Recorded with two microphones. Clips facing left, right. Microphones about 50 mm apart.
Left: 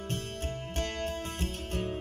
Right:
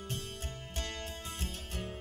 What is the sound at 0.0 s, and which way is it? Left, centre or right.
Music, left.